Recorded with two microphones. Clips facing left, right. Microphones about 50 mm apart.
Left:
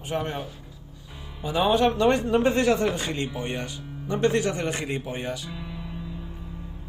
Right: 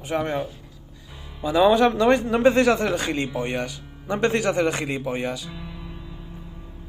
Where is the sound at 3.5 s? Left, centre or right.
Right.